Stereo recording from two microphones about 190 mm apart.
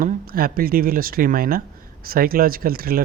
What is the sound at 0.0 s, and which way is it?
Speech, 50° right (ahead or behind).